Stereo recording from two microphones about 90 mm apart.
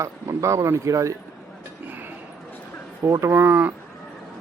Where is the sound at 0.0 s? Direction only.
35° right (ahead or behind).